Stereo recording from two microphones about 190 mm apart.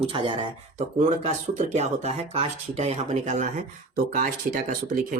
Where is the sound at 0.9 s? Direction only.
40° right (ahead or behind).